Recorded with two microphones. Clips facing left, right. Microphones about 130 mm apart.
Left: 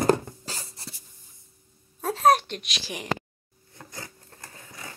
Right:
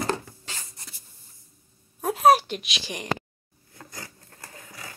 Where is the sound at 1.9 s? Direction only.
10° right (ahead or behind).